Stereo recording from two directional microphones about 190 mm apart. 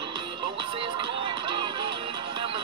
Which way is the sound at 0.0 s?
25° right (ahead or behind).